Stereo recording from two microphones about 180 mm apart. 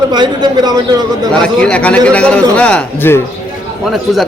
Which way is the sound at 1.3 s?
5° left (ahead or behind).